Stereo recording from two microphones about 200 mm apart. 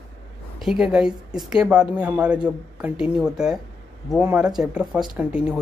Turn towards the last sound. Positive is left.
turn(degrees=-5)  # may be behind; listen again after turning